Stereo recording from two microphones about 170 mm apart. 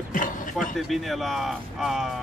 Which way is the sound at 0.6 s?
Centre (ahead or behind).